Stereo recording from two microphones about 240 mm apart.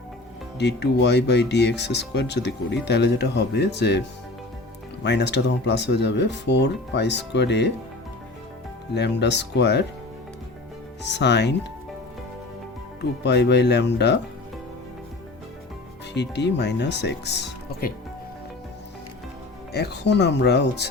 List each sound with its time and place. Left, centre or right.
0.6 s speech: left
5.0 s speech: left
9.0 s speech: left
11.0 s speech: left
13.0 s speech: left
16.1 s speech: left
19.7 s speech: left